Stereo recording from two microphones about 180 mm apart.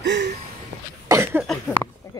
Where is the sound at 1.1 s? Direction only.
15° right (ahead or behind).